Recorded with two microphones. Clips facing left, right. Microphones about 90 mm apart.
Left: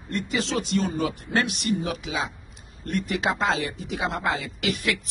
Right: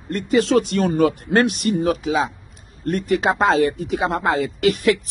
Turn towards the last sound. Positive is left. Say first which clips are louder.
# right 10 dB
turn(degrees=-40)  # may be behind; listen again after turning